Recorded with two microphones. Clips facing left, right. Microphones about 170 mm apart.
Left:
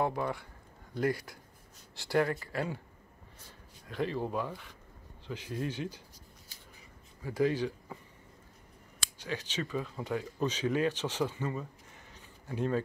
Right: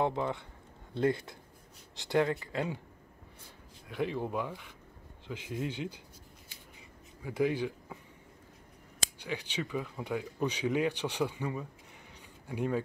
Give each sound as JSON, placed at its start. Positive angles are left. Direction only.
{"t": 0.0, "sound": "speech", "side_deg": -20}
{"t": 3.9, "sound": "speech", "side_deg": -15}
{"t": 7.2, "sound": "speech", "side_deg": -15}
{"t": 9.2, "sound": "speech", "side_deg": -15}